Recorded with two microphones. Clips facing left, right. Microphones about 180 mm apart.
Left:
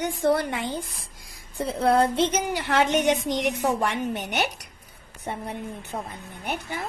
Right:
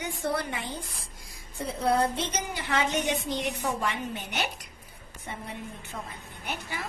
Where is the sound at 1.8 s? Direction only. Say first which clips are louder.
Left 5 dB; 90° left.